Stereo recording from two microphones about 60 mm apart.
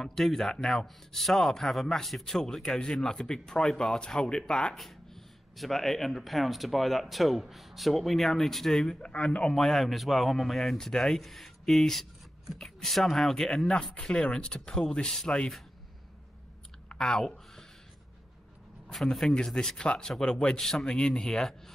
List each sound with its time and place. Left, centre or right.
0.0 s a man's voice: centre
4.7 s speech: centre
9.0 s a man's voice: centre
9.6 s a man's voice: centre
16.9 s a sound: centre
18.9 s a man's voice: centre